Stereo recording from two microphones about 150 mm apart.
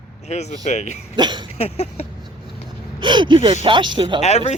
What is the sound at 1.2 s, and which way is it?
Cough, 30° right (ahead or behind).